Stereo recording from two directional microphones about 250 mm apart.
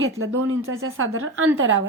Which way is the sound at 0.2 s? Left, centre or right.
Right.